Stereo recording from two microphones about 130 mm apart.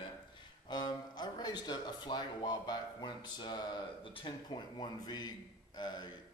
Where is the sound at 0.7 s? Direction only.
35° left (ahead or behind).